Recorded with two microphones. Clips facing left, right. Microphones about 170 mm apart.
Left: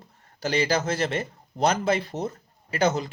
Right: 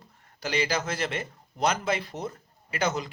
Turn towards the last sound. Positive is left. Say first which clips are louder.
# left 5 dB
turn(degrees=30)  # may be behind; listen again after turning